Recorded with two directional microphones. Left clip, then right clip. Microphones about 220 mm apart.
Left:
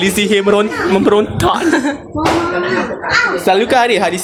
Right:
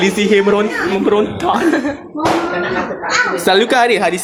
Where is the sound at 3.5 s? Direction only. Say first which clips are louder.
Right 1 dB; centre (ahead or behind).